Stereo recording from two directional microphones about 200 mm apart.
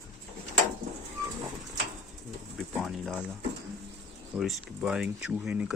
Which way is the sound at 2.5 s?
Centre (ahead or behind).